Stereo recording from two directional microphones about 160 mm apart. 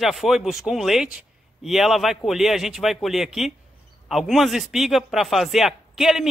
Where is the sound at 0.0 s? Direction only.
Centre (ahead or behind).